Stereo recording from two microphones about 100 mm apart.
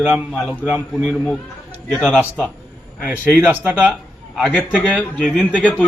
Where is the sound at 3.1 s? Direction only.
15° right (ahead or behind).